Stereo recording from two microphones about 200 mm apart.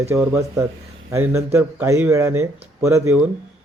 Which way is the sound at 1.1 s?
15° right (ahead or behind).